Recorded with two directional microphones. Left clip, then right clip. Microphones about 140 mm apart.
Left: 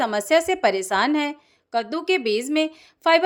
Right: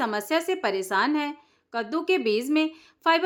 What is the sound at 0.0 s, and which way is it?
Speech, 30° left (ahead or behind).